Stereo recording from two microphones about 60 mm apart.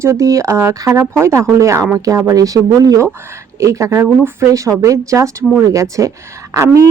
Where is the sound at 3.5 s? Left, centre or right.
Right.